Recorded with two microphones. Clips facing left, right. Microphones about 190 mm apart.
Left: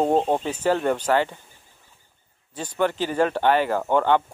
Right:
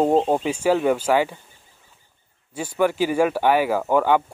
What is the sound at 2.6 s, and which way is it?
Speech, 10° right (ahead or behind).